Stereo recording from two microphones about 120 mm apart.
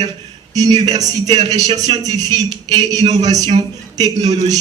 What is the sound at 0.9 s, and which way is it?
A man's voice, 30° right (ahead or behind).